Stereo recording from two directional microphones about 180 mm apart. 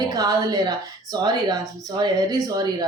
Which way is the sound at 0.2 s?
20° right (ahead or behind).